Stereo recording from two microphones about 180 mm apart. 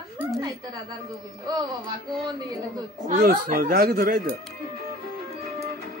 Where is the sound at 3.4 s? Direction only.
50° right (ahead or behind).